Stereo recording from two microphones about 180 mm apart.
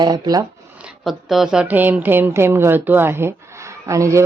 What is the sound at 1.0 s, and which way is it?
Speech, centre (ahead or behind).